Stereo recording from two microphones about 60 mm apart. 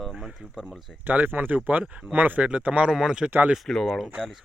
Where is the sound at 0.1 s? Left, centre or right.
Centre.